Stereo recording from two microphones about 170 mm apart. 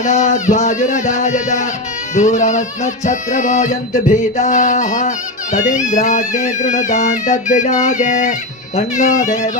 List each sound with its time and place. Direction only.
0.0 s music: 45° left (ahead or behind)